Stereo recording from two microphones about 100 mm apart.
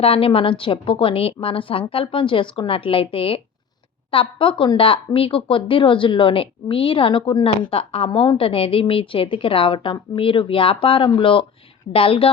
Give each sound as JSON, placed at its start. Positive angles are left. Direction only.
{"t": 0.0, "sound": "a woman's voice", "side_deg": 70}